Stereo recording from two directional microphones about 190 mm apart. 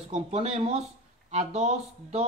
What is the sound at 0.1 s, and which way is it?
Speech, 35° right (ahead or behind).